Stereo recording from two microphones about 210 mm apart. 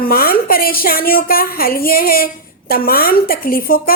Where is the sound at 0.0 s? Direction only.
45° left (ahead or behind).